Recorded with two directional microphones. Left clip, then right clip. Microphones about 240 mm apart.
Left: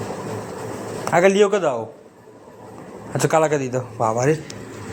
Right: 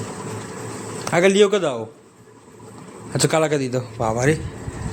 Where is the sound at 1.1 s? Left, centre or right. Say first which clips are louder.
Even; right.